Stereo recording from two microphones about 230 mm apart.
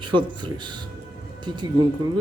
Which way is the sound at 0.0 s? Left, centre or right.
Centre.